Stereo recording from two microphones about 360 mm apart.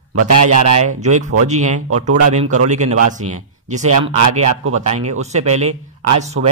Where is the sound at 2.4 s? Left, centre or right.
Right.